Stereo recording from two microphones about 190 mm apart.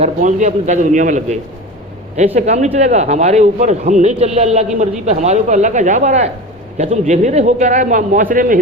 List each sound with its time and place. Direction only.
0.0 s speech: 40° right (ahead or behind)